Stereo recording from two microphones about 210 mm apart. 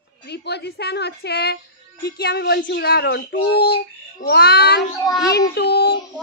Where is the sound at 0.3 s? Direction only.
50° left (ahead or behind).